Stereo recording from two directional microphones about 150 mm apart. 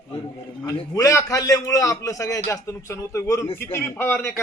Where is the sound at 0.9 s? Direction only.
20° left (ahead or behind).